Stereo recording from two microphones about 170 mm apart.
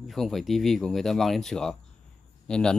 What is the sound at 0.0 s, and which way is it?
A man's voice, centre (ahead or behind).